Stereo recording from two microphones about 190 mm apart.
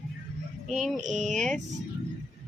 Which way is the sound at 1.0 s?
40° right (ahead or behind).